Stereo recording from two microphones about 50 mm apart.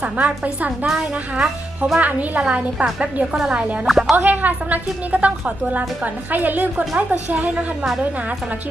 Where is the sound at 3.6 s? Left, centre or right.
Right.